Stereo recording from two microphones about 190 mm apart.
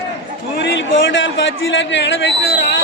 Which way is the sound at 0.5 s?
70° left (ahead or behind).